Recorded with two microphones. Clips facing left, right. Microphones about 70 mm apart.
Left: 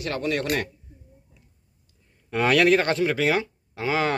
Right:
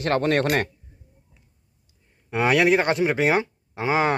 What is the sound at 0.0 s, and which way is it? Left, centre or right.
Speech, right.